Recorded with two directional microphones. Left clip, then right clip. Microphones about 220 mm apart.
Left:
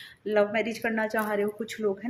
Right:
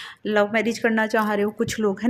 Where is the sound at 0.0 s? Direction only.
45° right (ahead or behind).